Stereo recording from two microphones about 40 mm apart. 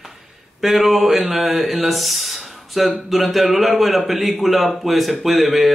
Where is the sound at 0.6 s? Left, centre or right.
Centre.